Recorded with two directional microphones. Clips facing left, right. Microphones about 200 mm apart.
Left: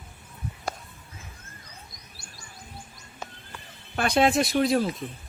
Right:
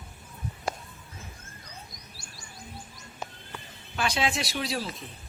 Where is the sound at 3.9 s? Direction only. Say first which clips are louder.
Left 7 dB; 50° left (ahead or behind).